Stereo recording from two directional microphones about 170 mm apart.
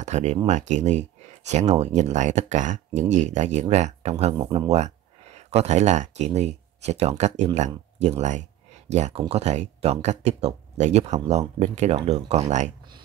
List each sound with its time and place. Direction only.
0.0 s speech: 40° right (ahead or behind)